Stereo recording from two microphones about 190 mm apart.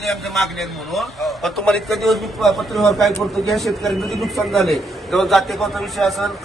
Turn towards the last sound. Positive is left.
turn(degrees=0)  # may be behind; listen again after turning